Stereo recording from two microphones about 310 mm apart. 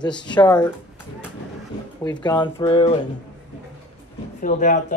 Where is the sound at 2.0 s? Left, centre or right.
Centre.